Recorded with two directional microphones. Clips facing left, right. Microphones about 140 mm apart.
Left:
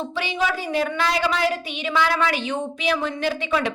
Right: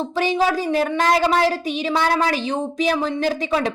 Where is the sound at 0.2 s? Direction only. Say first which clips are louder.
Right 6 dB; 40° right (ahead or behind).